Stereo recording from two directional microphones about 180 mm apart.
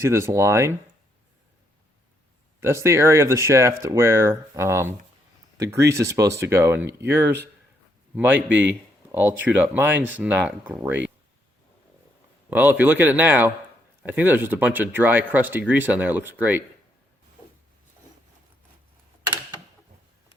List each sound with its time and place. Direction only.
0.0 s speech: 15° right (ahead or behind)
2.6 s speech: 15° right (ahead or behind)
12.5 s speech: 10° right (ahead or behind)